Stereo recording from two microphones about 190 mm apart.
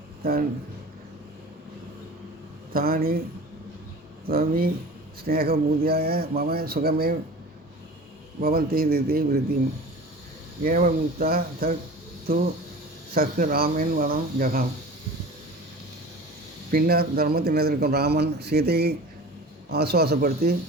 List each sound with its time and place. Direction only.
0.2 s speech: 50° right (ahead or behind)
2.7 s speech: 50° right (ahead or behind)
4.3 s speech: 50° right (ahead or behind)
8.4 s speech: 55° right (ahead or behind)
10.6 s speech: 45° right (ahead or behind)
16.7 s speech: 55° right (ahead or behind)